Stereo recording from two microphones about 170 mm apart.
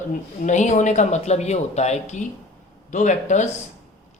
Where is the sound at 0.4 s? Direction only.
45° left (ahead or behind).